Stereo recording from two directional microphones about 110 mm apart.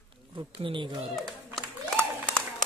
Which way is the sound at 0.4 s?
50° right (ahead or behind).